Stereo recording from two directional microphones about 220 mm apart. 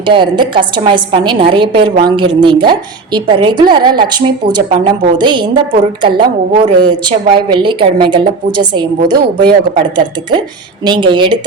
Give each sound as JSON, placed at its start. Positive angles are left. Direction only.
{"t": 0.0, "sound": "a woman's voice", "side_deg": -20}